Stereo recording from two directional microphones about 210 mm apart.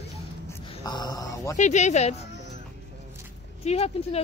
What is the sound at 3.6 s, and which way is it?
Speech, 30° left (ahead or behind).